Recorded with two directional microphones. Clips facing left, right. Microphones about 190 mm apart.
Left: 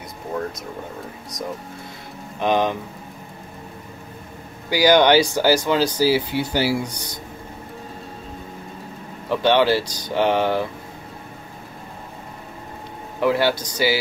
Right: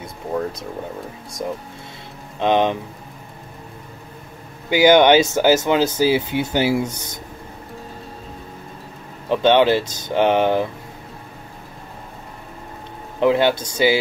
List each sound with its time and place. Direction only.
1.3 s speech: 25° right (ahead or behind)
4.6 s speech: 20° right (ahead or behind)
9.3 s speech: 20° right (ahead or behind)
13.2 s speech: 20° right (ahead or behind)